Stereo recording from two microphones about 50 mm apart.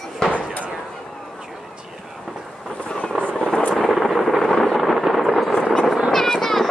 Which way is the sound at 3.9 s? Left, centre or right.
Centre.